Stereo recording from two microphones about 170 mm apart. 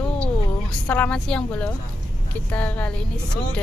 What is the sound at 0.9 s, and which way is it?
Speech, 5° left (ahead or behind).